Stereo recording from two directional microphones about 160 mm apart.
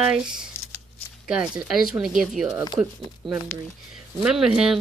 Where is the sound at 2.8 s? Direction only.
20° right (ahead or behind).